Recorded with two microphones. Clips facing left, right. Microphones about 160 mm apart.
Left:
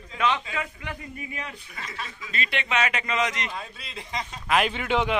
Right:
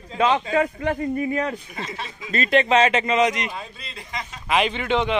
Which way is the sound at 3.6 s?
5° left (ahead or behind).